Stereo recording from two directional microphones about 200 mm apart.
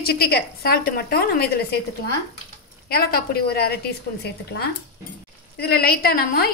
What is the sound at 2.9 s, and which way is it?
A woman's voice, 50° left (ahead or behind).